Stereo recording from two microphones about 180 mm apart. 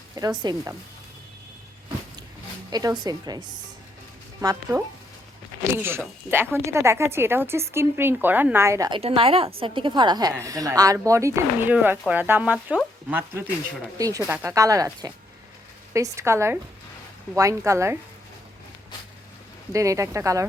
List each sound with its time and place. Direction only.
0.2 s speech: 20° right (ahead or behind)
2.6 s speech: 20° right (ahead or behind)
5.8 s speech: 15° right (ahead or behind)
9.0 s a woman's voice: 30° right (ahead or behind); by 17.9 s 15° right (ahead or behind)
19.7 s speech: 15° right (ahead or behind)